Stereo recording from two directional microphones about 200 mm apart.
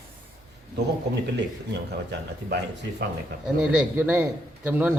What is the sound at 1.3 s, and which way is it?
A man's voice, 60° right (ahead or behind).